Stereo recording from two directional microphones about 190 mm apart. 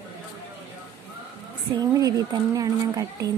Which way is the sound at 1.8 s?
20° right (ahead or behind).